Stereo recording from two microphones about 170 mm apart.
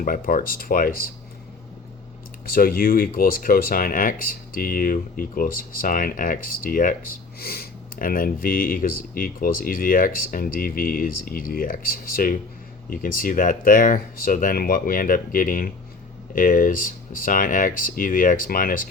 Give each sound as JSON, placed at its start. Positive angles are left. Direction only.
{"t": 0.0, "sound": "speech", "side_deg": 55}
{"t": 2.5, "sound": "speech", "side_deg": 60}